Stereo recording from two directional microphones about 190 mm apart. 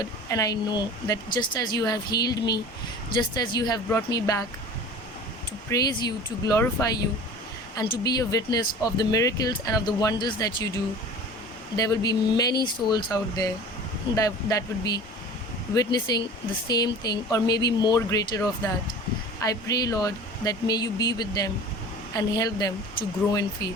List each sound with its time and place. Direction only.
0.0 s speech: 20° left (ahead or behind)
5.6 s speech: 20° left (ahead or behind)
8.0 s speech: 20° left (ahead or behind)
11.8 s speech: 20° left (ahead or behind)